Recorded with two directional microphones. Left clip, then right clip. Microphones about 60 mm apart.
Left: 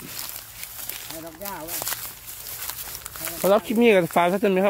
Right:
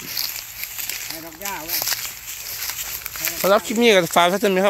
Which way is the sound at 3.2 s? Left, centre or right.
Centre.